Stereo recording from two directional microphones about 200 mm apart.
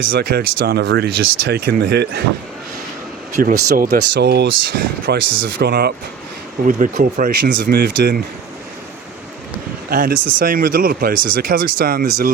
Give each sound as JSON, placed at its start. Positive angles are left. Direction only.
{"t": 0.1, "sound": "speech", "side_deg": -50}
{"t": 3.3, "sound": "speech", "side_deg": -45}
{"t": 6.7, "sound": "speech", "side_deg": -40}
{"t": 9.9, "sound": "speech", "side_deg": -45}